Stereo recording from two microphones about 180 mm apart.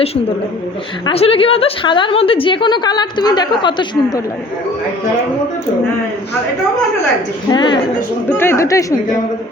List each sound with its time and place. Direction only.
1.0 s a woman's voice: 30° left (ahead or behind)
7.5 s a woman's voice: 25° left (ahead or behind)
8.3 s a woman's voice: 15° left (ahead or behind)